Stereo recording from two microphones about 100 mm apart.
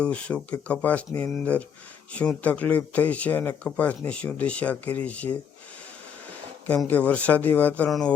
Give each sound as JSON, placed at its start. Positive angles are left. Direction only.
{"t": 0.0, "sound": "speech", "side_deg": 10}
{"t": 6.8, "sound": "speech", "side_deg": 15}
{"t": 7.9, "sound": "a sound", "side_deg": 0}